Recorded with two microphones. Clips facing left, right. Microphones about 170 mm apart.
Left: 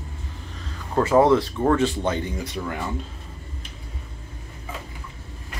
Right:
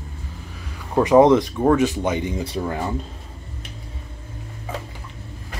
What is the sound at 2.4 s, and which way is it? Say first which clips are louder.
Speech: right 4 dB; 35° right (ahead or behind).